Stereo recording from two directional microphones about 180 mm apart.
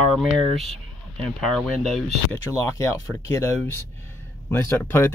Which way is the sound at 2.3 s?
15° left (ahead or behind).